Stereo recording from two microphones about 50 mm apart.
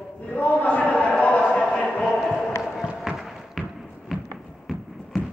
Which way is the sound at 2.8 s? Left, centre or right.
Centre.